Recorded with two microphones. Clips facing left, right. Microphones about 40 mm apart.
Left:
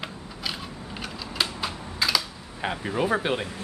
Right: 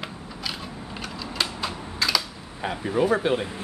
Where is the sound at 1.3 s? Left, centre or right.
Centre.